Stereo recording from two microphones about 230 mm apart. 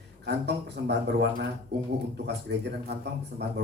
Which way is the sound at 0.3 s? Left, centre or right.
Right.